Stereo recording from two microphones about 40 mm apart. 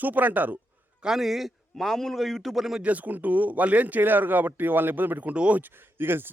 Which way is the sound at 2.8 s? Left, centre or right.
Right.